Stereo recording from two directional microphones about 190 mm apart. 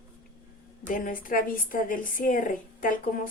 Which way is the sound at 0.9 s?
45° left (ahead or behind).